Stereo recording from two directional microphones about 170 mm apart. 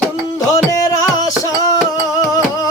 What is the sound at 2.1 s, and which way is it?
Music, 20° left (ahead or behind).